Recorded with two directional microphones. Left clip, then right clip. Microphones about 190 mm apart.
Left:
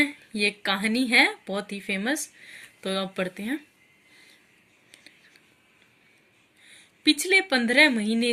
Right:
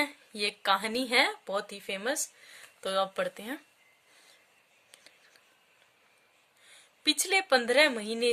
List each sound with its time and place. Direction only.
0.0 s speech: 60° right (ahead or behind)
4.9 s a sound: 60° right (ahead or behind)
6.7 s a woman's voice: 55° right (ahead or behind)